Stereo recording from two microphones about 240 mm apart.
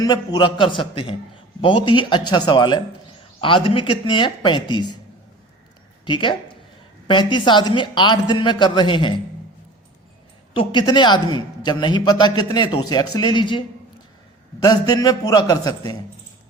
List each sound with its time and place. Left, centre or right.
0.0 s speech: centre
6.1 s speech: centre
10.5 s a man's voice: left